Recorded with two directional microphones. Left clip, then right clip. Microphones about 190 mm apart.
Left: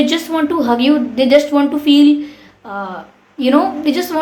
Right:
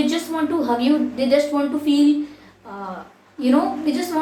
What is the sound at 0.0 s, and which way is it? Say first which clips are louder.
A woman's voice: left 6 dB; 55° left (ahead or behind).